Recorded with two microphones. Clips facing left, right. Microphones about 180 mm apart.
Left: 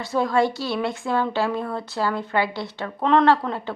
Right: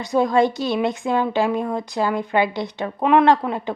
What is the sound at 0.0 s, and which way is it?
A woman's voice, 15° right (ahead or behind).